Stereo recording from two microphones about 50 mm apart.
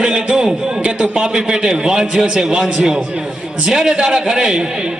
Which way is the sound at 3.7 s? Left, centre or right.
Centre.